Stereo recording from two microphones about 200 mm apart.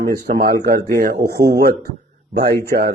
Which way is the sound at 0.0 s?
50° right (ahead or behind).